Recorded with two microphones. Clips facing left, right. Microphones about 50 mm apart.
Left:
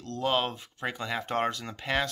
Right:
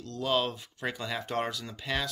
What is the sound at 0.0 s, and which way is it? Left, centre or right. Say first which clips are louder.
Speech: left 4 dB; left.